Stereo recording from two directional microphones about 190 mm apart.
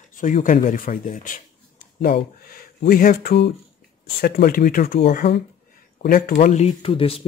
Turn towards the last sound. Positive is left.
turn(degrees=30)  # may be behind; listen again after turning